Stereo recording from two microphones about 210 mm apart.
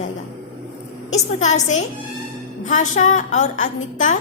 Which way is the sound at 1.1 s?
35° left (ahead or behind).